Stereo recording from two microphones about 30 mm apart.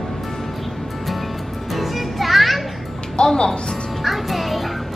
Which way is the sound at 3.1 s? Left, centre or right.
Left.